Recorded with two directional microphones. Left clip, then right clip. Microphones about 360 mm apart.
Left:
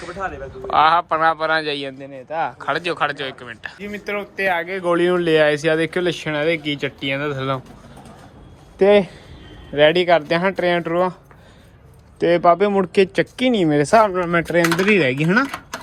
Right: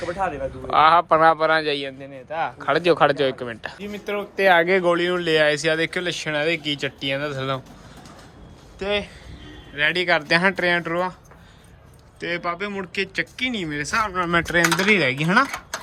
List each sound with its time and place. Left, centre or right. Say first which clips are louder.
0.7 s a man's voice: even; centre
3.8 s speech: left 3 dB; centre
4.5 s speech: right 6 dB; right
4.8 s speech: left 3 dB; centre
8.8 s a man's voice: left 11 dB; centre
9.7 s speech: left 6 dB; centre
12.2 s speech: left 12 dB; centre